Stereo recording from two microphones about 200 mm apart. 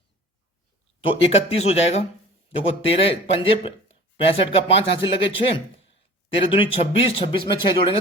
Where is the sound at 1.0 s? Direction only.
30° left (ahead or behind).